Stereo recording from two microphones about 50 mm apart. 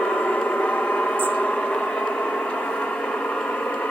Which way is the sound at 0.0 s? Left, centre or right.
Left.